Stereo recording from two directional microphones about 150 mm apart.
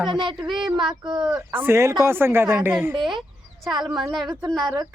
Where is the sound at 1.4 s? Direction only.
15° right (ahead or behind).